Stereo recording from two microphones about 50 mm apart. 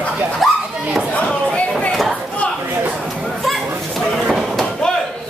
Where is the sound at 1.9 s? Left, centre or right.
Centre.